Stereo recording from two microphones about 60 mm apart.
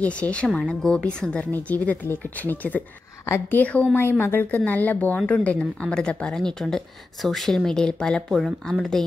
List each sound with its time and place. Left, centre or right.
0.0 s speech: centre
3.9 s speech: left; by 8.2 s centre
8.3 s speech: centre